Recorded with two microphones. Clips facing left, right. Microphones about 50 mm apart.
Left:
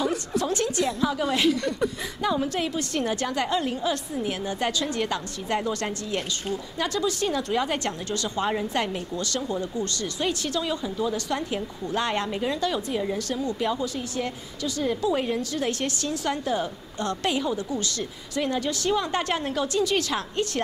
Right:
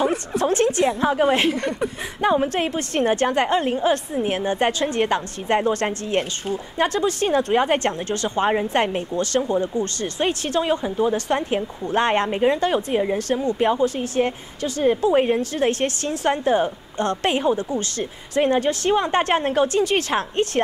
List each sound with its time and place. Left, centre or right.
0.0 s a woman's voice: right